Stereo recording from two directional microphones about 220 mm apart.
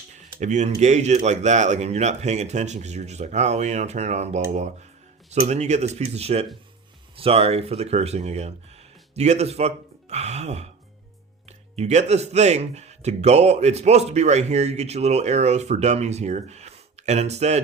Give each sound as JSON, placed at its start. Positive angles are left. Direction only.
{"t": 0.3, "sound": "speech", "side_deg": -35}